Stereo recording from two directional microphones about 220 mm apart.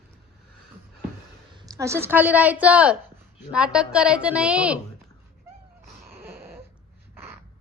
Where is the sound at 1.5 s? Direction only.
15° right (ahead or behind).